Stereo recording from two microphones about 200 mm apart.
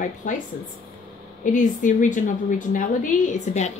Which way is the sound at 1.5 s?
40° left (ahead or behind).